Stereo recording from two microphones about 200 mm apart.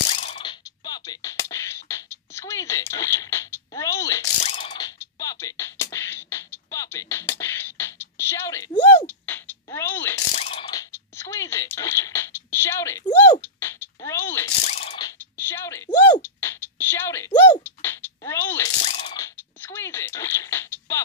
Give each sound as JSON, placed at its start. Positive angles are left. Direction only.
{"t": 0.1, "sound": "a sound", "side_deg": 30}
{"t": 4.5, "sound": "music", "side_deg": 25}
{"t": 7.3, "sound": "beatboxing", "side_deg": 10}
{"t": 9.0, "sound": "a sound", "side_deg": 10}
{"t": 10.3, "sound": "ratchet", "side_deg": 30}
{"t": 10.6, "sound": "a sound", "side_deg": 20}
{"t": 14.7, "sound": "mechanisms", "side_deg": 30}
{"t": 16.2, "sound": "beatboxing", "side_deg": 10}
{"t": 18.9, "sound": "mechanisms", "side_deg": 25}